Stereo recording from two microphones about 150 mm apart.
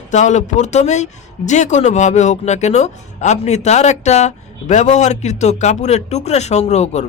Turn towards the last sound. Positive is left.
turn(degrees=45)  # may be behind; listen again after turning